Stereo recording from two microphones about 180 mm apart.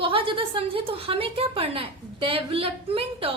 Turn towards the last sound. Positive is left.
turn(degrees=-30)  # may be behind; listen again after turning